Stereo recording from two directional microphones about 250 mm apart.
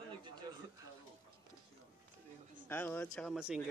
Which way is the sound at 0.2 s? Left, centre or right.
Centre.